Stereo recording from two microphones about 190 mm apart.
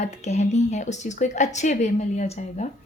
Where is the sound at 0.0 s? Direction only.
35° left (ahead or behind).